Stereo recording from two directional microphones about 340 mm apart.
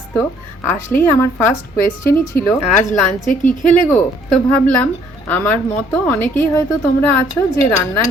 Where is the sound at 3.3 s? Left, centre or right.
Left.